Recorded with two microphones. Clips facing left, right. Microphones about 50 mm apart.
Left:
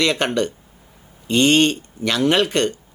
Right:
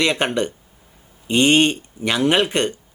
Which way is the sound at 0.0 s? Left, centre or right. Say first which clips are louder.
Even; centre.